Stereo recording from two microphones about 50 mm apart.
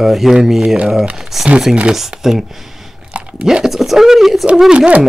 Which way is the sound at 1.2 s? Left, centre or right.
Centre.